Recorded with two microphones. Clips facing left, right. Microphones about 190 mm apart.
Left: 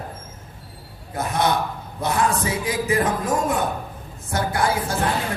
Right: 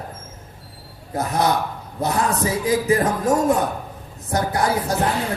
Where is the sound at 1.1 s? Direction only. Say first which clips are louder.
Right 1 dB; 35° right (ahead or behind).